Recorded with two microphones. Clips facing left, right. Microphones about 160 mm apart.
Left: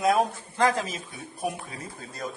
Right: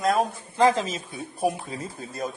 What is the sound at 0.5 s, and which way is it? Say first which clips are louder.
Speech: right 4 dB; 25° right (ahead or behind).